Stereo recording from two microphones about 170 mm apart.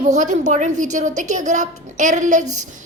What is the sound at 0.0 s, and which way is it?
A woman's voice, 45° right (ahead or behind).